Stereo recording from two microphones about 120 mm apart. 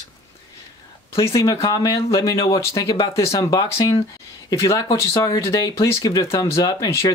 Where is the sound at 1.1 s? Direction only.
25° left (ahead or behind).